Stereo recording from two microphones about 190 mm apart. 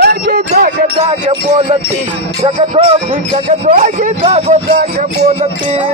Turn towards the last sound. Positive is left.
turn(degrees=-30)  # may be behind; listen again after turning